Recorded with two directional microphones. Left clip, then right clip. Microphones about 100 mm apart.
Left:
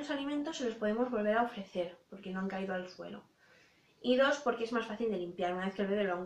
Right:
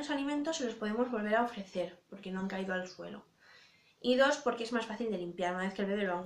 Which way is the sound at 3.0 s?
15° right (ahead or behind).